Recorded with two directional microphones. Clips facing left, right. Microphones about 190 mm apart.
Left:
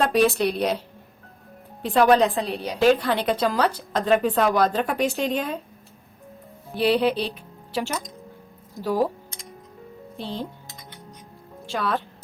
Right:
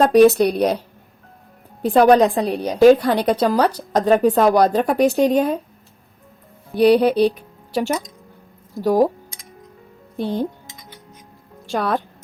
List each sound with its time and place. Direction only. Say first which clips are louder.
0.0 s a woman's voice: right 8 dB; 40° right (ahead or behind)
1.8 s a woman's voice: right 5 dB; 40° right (ahead or behind)
6.7 s a woman's voice: right 7 dB; 45° right (ahead or behind)
10.2 s a woman's voice: right 9 dB; 45° right (ahead or behind)
11.7 s a woman's voice: right 5 dB; 50° right (ahead or behind)